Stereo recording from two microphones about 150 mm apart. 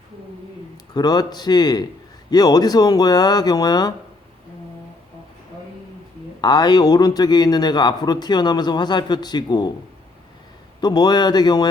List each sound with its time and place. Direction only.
0.9 s a man's voice: 25° left (ahead or behind)
6.4 s a man's voice: 30° left (ahead or behind)
10.8 s a man's voice: 25° left (ahead or behind)